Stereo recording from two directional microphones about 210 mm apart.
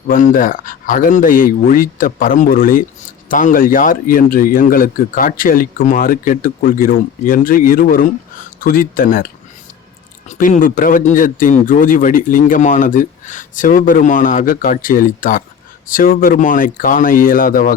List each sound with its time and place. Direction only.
0.1 s speech: 40° left (ahead or behind)
10.2 s speech: 35° left (ahead or behind)